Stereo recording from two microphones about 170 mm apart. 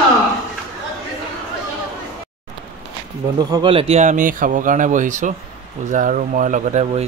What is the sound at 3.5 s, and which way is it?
Speech, 30° right (ahead or behind).